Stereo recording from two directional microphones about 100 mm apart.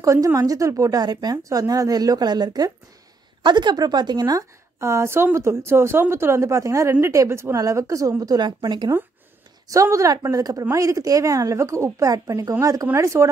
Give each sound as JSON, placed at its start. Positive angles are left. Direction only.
{"t": 0.0, "sound": "a woman's voice", "side_deg": -30}
{"t": 9.7, "sound": "a woman's voice", "side_deg": -30}